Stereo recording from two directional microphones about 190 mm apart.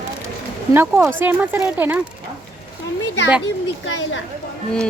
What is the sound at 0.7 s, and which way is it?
Speech, 10° right (ahead or behind).